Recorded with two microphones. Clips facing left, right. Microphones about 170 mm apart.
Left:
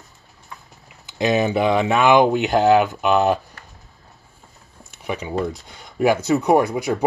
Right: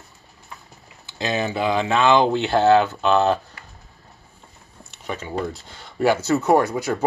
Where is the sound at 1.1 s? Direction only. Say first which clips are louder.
Left 5 dB; 20° left (ahead or behind).